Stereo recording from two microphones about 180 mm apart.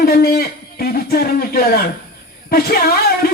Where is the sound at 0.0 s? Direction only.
60° left (ahead or behind).